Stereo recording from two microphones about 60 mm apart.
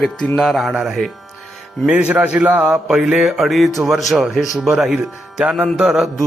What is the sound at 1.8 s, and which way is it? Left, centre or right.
A man's voice, right.